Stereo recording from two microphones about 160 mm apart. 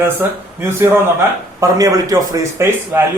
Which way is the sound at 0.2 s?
15° right (ahead or behind).